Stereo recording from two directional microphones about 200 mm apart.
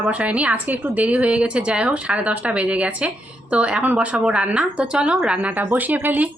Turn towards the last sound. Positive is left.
turn(degrees=-10)  # may be behind; listen again after turning